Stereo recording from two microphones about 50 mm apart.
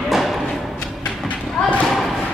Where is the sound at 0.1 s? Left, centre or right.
Centre.